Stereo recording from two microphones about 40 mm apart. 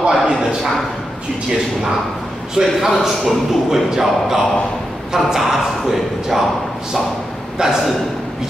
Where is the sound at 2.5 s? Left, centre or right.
Centre.